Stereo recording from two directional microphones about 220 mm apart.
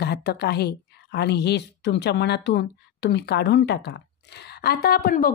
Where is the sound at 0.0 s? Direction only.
45° left (ahead or behind).